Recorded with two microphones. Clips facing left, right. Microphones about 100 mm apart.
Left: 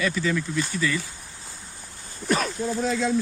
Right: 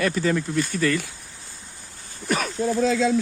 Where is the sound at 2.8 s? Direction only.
90° right.